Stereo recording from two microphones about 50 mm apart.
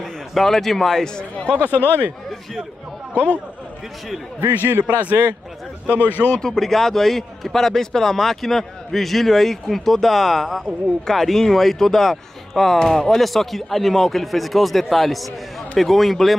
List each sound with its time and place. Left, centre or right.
0.0 s speech: centre
1.6 s speech: left
1.9 s a man's voice: right
4.6 s a man's voice: right
5.9 s speech: left
6.3 s a man's voice: centre